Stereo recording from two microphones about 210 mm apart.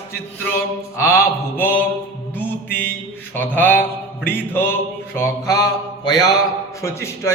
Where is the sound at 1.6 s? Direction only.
10° left (ahead or behind).